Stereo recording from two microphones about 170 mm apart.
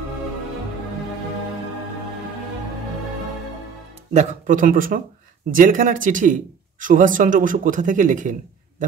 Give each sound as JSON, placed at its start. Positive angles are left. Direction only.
{"t": 4.1, "sound": "a man's voice", "side_deg": -45}